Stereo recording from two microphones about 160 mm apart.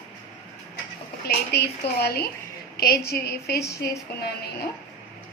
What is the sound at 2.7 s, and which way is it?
Speech, 70° left (ahead or behind).